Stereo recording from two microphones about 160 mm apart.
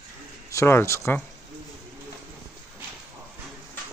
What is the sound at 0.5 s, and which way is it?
Speech, 15° left (ahead or behind).